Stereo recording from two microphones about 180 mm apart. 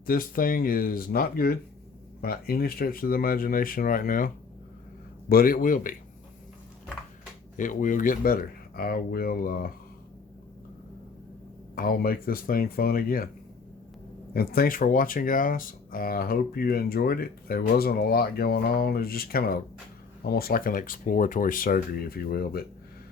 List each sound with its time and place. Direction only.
0.0 s speech: 55° left (ahead or behind)
5.3 s speech: 55° left (ahead or behind)
7.5 s speech: 45° left (ahead or behind)
11.7 s speech: 55° left (ahead or behind)
14.3 s speech: 55° left (ahead or behind)